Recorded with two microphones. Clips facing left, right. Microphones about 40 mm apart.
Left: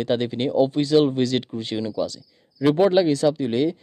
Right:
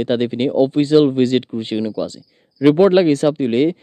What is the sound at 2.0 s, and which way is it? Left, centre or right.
Speech, right.